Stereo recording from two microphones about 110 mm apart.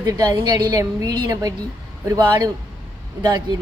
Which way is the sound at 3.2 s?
40° right (ahead or behind).